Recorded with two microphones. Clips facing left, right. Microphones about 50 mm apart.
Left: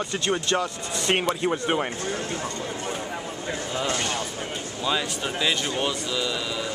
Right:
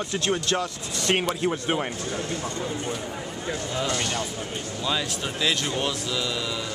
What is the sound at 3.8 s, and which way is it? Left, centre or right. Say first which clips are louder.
Speech: left 1 dB; centre.